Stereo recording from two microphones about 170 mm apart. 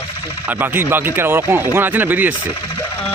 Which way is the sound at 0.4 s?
10° right (ahead or behind).